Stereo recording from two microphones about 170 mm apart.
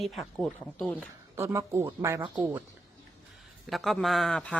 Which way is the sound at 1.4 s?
15° right (ahead or behind).